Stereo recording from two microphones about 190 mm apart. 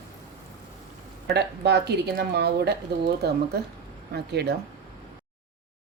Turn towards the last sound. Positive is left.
turn(degrees=-60)  # may be behind; listen again after turning